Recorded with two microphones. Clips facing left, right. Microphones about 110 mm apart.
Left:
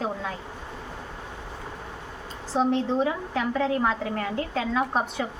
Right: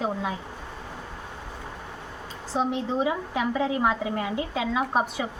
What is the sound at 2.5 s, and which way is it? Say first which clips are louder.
A woman's voice: left 3 dB; 5° right (ahead or behind).